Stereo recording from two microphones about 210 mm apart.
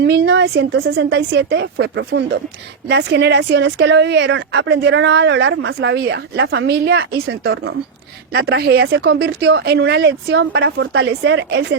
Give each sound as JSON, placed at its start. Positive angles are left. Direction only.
{"t": 0.0, "sound": "speech", "side_deg": -55}